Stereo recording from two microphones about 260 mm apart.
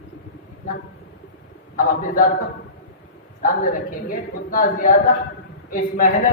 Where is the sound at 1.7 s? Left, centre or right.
Left.